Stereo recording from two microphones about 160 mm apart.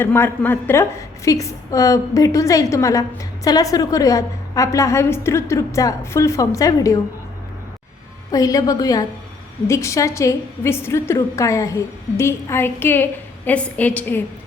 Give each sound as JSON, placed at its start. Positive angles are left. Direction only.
{"t": 0.0, "sound": "a woman's voice", "side_deg": 15}
{"t": 8.3, "sound": "a woman's voice", "side_deg": 20}